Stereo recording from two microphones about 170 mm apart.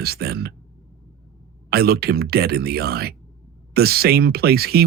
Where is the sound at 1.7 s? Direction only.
65° right (ahead or behind).